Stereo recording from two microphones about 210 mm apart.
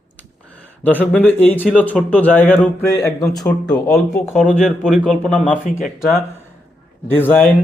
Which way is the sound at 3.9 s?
5° left (ahead or behind).